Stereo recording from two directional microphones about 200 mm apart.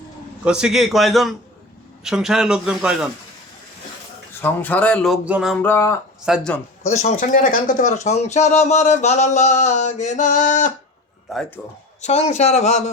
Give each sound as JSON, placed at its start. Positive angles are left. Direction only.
{"t": 0.4, "sound": "speech", "side_deg": -5}
{"t": 4.4, "sound": "speech", "side_deg": 10}
{"t": 5.6, "sound": "speech", "side_deg": 10}
{"t": 6.2, "sound": "speech", "side_deg": -5}
{"t": 6.9, "sound": "speech", "side_deg": 35}
{"t": 12.0, "sound": "speech", "side_deg": 35}